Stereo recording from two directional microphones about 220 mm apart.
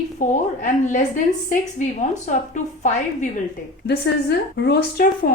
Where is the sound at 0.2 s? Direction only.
35° left (ahead or behind).